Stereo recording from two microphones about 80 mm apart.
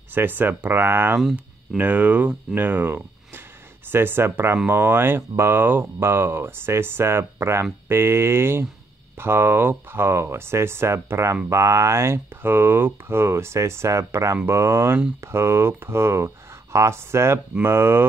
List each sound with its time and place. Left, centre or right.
0.1 s speech: right